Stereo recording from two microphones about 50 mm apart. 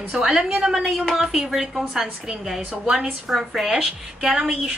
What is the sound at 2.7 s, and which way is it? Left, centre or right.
Speech, centre.